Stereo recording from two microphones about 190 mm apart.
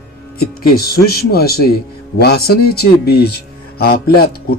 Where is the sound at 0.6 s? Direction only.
50° left (ahead or behind).